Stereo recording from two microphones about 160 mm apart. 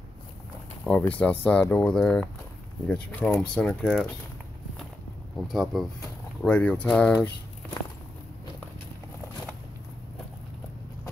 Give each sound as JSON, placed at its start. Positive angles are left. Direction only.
{"t": 0.8, "sound": "speech", "side_deg": 10}
{"t": 5.5, "sound": "speech", "side_deg": 0}